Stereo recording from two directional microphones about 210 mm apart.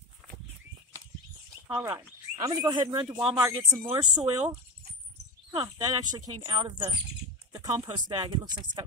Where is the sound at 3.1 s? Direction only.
10° right (ahead or behind).